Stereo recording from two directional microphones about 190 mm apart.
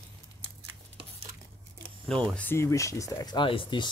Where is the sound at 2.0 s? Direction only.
5° left (ahead or behind); by 3.9 s 25° left (ahead or behind).